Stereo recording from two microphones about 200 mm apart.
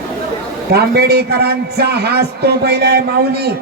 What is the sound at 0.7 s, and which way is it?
A man's voice, 55° right (ahead or behind).